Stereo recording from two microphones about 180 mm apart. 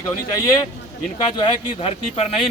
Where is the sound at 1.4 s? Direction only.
30° left (ahead or behind).